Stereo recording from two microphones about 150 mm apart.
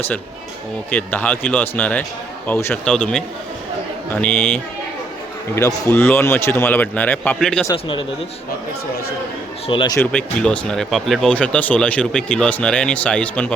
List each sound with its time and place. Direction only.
0.9 s speech: 10° left (ahead or behind)
2.8 s a man's voice: 5° left (ahead or behind)
7.7 s speech: 30° left (ahead or behind)
9.6 s speech: 35° left (ahead or behind)
10.1 s speech: 5° left (ahead or behind)